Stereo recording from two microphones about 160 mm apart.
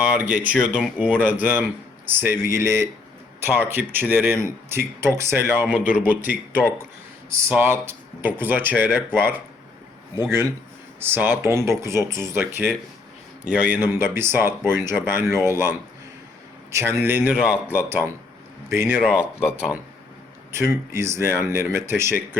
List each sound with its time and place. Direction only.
0.0 s speech: 5° right (ahead or behind)
11.0 s speech: 15° right (ahead or behind)